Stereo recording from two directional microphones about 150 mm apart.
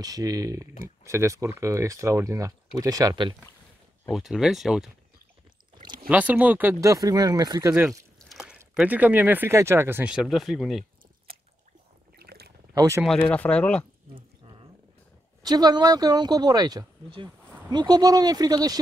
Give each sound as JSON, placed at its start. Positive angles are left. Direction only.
{"t": 0.0, "sound": "speech", "side_deg": -25}
{"t": 4.1, "sound": "speech", "side_deg": 0}
{"t": 5.8, "sound": "pour", "side_deg": -30}
{"t": 6.0, "sound": "speech", "side_deg": -10}
{"t": 8.3, "sound": "a sound", "side_deg": -5}
{"t": 8.7, "sound": "speech", "side_deg": -10}
{"t": 12.2, "sound": "pour", "side_deg": -90}
{"t": 12.7, "sound": "speech", "side_deg": -20}
{"t": 13.3, "sound": "speech", "side_deg": 10}
{"t": 14.1, "sound": "a sound", "side_deg": -35}
{"t": 15.4, "sound": "speech", "side_deg": -25}